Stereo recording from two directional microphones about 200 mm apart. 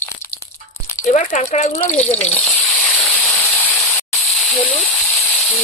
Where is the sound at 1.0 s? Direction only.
40° left (ahead or behind).